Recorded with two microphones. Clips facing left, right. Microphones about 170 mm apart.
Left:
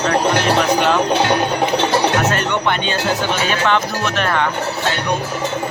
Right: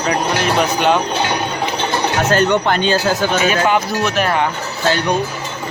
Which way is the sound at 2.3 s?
35° right (ahead or behind).